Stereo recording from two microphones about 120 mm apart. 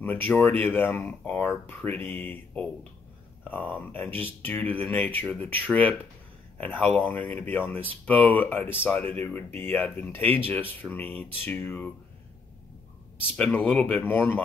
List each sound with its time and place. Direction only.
0.0 s speech: 15° left (ahead or behind)
13.4 s speech: 15° left (ahead or behind)